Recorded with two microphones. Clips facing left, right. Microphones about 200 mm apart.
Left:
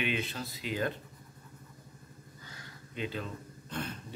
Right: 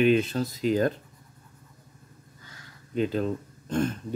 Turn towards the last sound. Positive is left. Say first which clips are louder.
# right 12 dB
turn(degrees=-45)  # may be behind; listen again after turning